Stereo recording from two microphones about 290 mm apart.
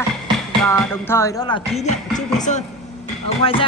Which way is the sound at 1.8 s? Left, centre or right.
Left.